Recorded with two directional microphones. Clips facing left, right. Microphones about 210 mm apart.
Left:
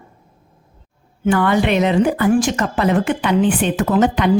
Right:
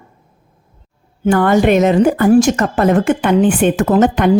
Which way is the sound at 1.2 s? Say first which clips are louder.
Right 4 dB; 45° right (ahead or behind).